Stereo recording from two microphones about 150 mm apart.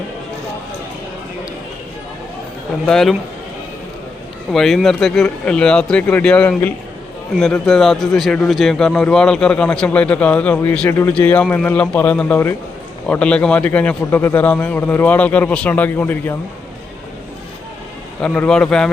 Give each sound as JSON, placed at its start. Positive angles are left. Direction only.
{"t": 2.8, "sound": "a man's voice", "side_deg": 5}
{"t": 4.5, "sound": "a man's voice", "side_deg": 0}
{"t": 18.2, "sound": "a man's voice", "side_deg": 5}